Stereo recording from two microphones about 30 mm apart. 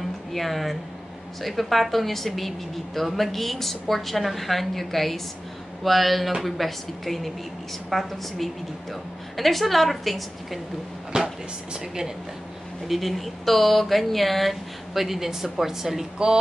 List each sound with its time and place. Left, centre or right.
0.3 s speech: centre
11.1 s a woman's voice: right
12.8 s speech: centre